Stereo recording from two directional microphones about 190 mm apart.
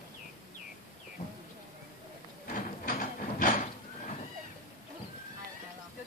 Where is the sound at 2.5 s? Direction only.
45° left (ahead or behind).